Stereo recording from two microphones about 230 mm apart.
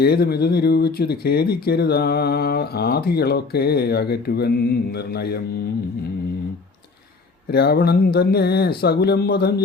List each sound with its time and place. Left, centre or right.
0.0 s speech: left
7.5 s speech: left